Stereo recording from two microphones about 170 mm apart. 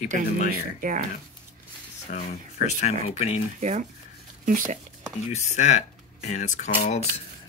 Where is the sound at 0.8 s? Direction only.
50° right (ahead or behind).